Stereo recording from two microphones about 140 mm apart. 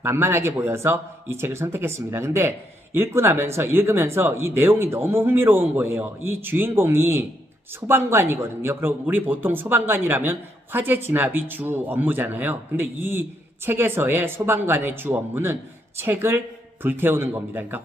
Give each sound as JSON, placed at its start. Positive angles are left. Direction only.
{"t": 0.0, "sound": "a man's voice", "side_deg": -20}